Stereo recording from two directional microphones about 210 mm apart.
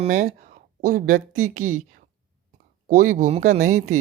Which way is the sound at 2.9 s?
40° right (ahead or behind).